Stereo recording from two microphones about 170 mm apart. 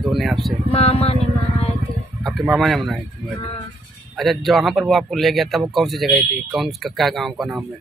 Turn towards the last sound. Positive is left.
turn(degrees=0)  # may be behind; listen again after turning